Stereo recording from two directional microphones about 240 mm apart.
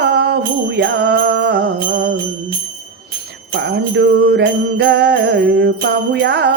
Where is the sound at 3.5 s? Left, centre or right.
Right.